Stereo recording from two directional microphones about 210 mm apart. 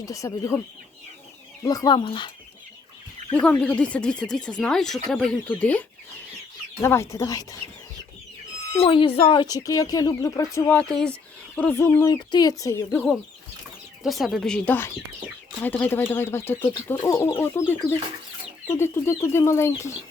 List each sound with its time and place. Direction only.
0.0 s speech: 15° left (ahead or behind)
1.6 s speech: 15° left (ahead or behind)
3.3 s speech: 5° left (ahead or behind)
6.8 s speech: 10° left (ahead or behind)
8.8 s speech: 25° left (ahead or behind)
18.7 s speech: 10° left (ahead or behind)